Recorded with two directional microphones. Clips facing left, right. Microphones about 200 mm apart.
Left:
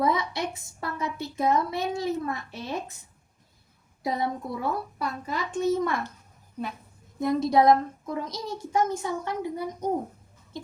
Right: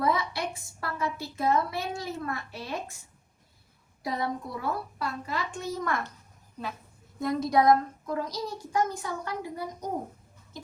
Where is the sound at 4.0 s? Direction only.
20° left (ahead or behind).